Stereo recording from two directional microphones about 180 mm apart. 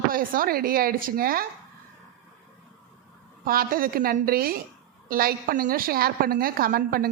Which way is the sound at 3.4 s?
55° right (ahead or behind).